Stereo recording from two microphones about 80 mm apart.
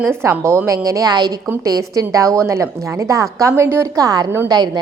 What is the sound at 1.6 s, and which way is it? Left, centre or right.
A woman's voice, right.